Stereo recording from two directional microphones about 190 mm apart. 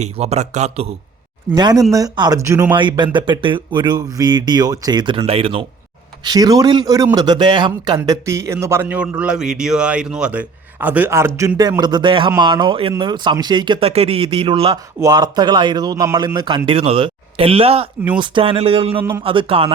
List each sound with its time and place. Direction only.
0.0 s speech: 35° right (ahead or behind)
1.5 s a man's voice: 20° right (ahead or behind)
2.7 s a man's voice: 25° right (ahead or behind)
18.9 s a man's voice: 10° right (ahead or behind)
19.2 s speech: 30° right (ahead or behind)